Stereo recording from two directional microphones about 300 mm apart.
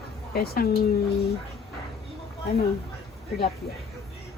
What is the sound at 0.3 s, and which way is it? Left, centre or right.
Speech, left.